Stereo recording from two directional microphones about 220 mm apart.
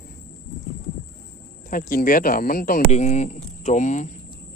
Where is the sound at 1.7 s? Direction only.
40° left (ahead or behind).